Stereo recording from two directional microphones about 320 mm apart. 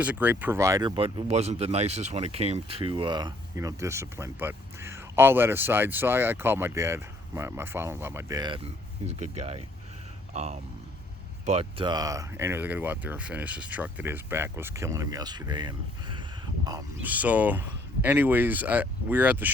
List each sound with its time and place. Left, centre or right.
0.0 s speech: centre
10.3 s speech: centre